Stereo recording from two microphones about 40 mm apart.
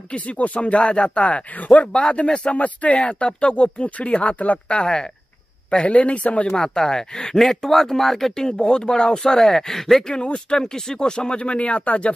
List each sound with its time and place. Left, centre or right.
0.1 s speech: left
4.7 s speech: left
6.4 s speech: centre
10.1 s speech: left